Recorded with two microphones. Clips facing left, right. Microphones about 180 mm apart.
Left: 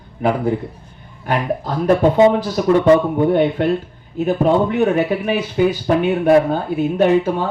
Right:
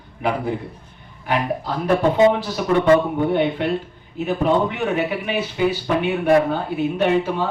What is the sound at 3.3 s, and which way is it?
Speech, 45° left (ahead or behind).